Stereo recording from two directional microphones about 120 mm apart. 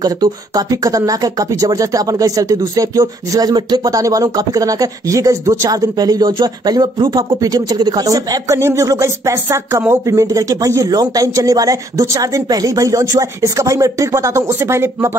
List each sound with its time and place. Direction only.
0.0 s speech: 30° right (ahead or behind)